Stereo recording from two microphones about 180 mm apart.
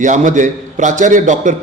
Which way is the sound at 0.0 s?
45° right (ahead or behind).